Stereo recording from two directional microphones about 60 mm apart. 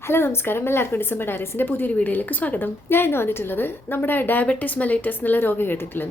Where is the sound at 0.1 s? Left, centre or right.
Left.